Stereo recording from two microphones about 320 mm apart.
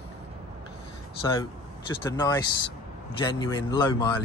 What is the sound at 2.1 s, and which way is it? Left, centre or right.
Speech, centre.